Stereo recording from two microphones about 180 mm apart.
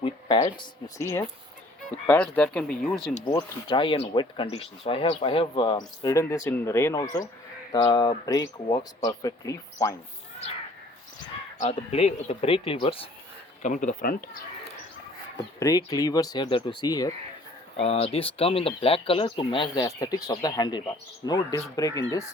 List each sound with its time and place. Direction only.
0.0 s a sound: 25° left (ahead or behind)
2.0 s speech: 10° left (ahead or behind)
3.2 s speech: 25° left (ahead or behind)
11.6 s speech: 35° left (ahead or behind)
13.6 s speech: 45° left (ahead or behind)
15.5 s speech: 20° left (ahead or behind)
17.7 s speech: 35° left (ahead or behind)